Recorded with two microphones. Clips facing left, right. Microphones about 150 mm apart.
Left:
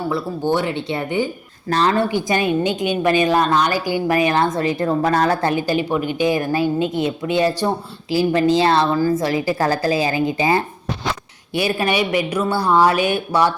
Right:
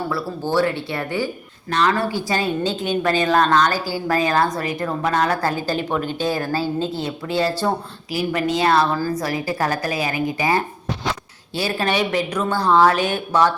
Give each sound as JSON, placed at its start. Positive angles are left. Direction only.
{"t": 0.1, "sound": "a woman's voice", "side_deg": 20}
{"t": 5.4, "sound": "a woman's voice", "side_deg": 20}
{"t": 8.1, "sound": "a woman's voice", "side_deg": 30}
{"t": 11.5, "sound": "a woman's voice", "side_deg": 15}